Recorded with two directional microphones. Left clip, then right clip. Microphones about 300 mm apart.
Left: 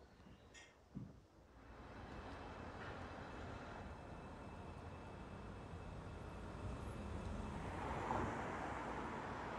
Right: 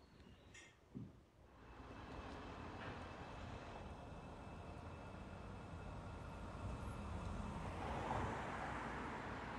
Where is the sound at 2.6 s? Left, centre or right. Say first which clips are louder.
Even; left.